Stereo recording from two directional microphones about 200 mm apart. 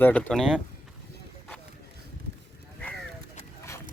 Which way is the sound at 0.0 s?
5° left (ahead or behind).